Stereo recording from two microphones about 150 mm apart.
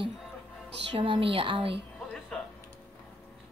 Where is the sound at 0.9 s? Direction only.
35° right (ahead or behind).